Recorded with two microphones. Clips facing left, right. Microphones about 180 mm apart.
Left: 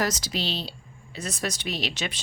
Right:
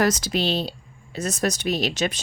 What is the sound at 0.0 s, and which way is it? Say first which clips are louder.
Speech: right 6 dB; 55° right (ahead or behind).